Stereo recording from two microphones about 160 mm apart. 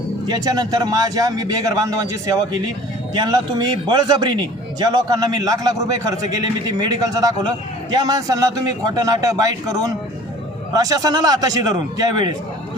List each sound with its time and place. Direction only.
0.3 s speech: 25° right (ahead or behind)